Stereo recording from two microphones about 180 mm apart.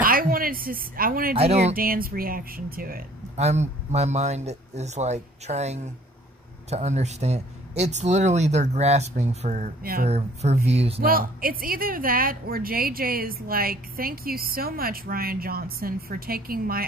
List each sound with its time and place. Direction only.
0.0 s speech: 55° right (ahead or behind)
1.4 s speech: 35° right (ahead or behind)
1.8 s speech: 55° right (ahead or behind)
3.3 s speech: 40° right (ahead or behind)
11.0 s speech: 55° right (ahead or behind)